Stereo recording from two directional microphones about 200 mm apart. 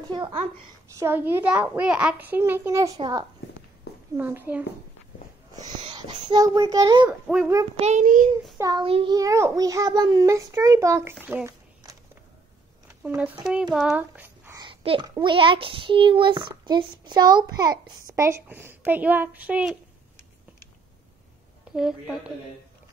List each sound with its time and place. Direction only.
0.1 s speech: 25° right (ahead or behind)
0.9 s a child's voice: 10° right (ahead or behind)
3.9 s a sound: 55° left (ahead or behind)
4.2 s a child's voice: 10° right (ahead or behind)
5.6 s wheeze: 20° right (ahead or behind)
6.3 s a child's voice: 20° right (ahead or behind)
7.1 s a child's voice: 5° right (ahead or behind)
7.7 s child singing: 35° right (ahead or behind)
8.5 s a child's voice: 20° right (ahead or behind)
13.0 s a child's voice: 5° right (ahead or behind)
21.7 s a child's voice: centre (ahead or behind)